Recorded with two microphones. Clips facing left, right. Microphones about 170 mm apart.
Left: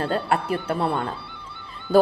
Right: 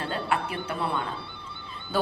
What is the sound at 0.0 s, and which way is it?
Speech, 40° left (ahead or behind).